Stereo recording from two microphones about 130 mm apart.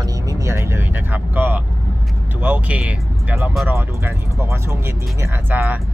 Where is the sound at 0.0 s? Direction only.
25° right (ahead or behind).